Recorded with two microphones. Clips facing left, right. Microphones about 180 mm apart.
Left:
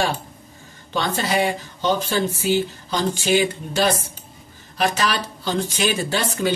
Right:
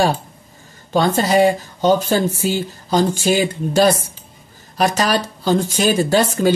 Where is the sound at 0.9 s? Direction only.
40° right (ahead or behind).